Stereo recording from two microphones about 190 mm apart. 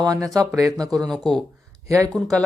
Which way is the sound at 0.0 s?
20° right (ahead or behind).